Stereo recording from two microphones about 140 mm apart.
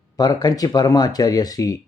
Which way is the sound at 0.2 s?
30° left (ahead or behind).